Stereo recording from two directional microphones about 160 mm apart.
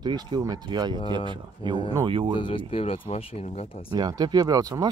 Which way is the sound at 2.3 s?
35° left (ahead or behind).